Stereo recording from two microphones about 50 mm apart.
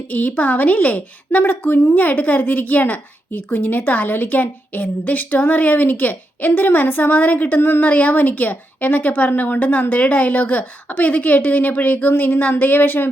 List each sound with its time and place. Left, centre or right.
0.1 s a woman's voice: left
2.0 s a woman's voice: left